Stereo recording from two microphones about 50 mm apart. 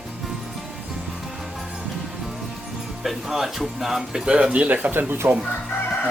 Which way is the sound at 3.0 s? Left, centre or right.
Centre.